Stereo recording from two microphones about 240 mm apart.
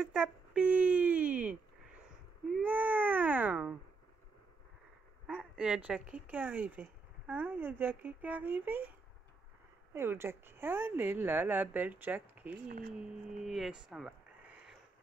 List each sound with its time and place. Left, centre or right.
0.0 s a sound: centre
2.5 s baby cry: centre
5.2 s speech: centre
9.9 s a woman's voice: centre
12.6 s speech: right
12.9 s speech: centre